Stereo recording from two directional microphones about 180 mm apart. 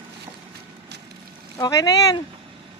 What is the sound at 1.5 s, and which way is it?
Speech, 20° left (ahead or behind).